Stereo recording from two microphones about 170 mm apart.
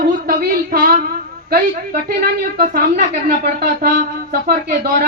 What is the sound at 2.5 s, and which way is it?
Speech, 60° right (ahead or behind).